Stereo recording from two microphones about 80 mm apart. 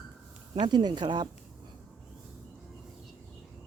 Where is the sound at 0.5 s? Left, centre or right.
Right.